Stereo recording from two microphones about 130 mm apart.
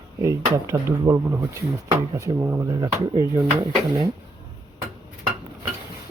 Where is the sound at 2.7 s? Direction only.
35° right (ahead or behind).